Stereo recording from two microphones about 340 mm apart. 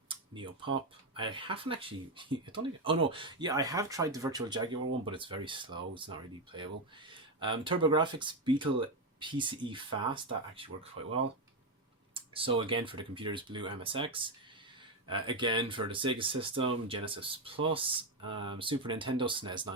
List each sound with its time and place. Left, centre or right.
0.1 s tick-tock: centre
1.1 s speech: centre
12.1 s typing: centre
12.5 s speech: centre